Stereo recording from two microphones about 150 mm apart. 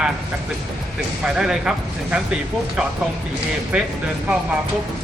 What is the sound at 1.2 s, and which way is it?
Speech, 5° right (ahead or behind).